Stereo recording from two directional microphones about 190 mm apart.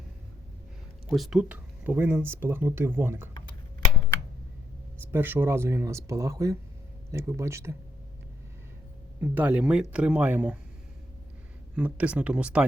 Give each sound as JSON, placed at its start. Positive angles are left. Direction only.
{"t": 1.0, "sound": "speech", "side_deg": 0}
{"t": 4.9, "sound": "speech", "side_deg": -10}
{"t": 9.2, "sound": "speech", "side_deg": -10}
{"t": 11.8, "sound": "speech", "side_deg": -5}